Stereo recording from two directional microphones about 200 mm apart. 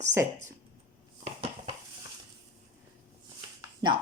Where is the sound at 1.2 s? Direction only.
30° right (ahead or behind).